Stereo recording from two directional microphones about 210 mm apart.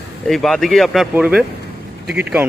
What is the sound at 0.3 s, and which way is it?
Speech, centre (ahead or behind).